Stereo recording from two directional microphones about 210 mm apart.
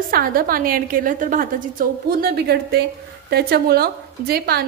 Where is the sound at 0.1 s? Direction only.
45° right (ahead or behind).